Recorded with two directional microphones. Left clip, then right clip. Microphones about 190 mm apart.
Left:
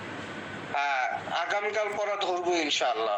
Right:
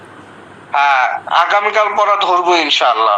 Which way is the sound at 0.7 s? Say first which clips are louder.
Right 16 dB; 5° right (ahead or behind).